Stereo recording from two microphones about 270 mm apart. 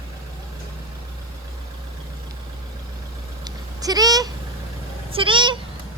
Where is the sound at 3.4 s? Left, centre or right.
Centre.